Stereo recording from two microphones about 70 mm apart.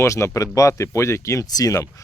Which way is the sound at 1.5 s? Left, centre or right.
Left.